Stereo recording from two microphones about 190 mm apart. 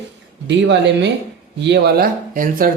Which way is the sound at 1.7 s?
55° right (ahead or behind).